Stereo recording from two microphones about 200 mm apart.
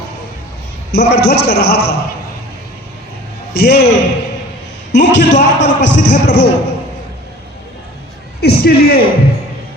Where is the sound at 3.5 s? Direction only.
55° left (ahead or behind).